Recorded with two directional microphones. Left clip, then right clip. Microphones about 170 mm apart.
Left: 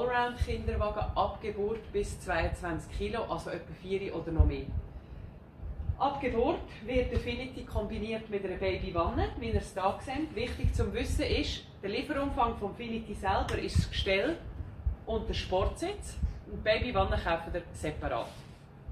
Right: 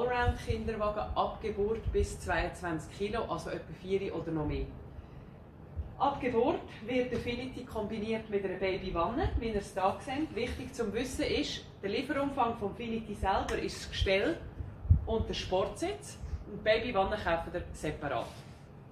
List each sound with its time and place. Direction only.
0.0 s a woman's voice: centre (ahead or behind)
5.9 s a woman's voice: centre (ahead or behind)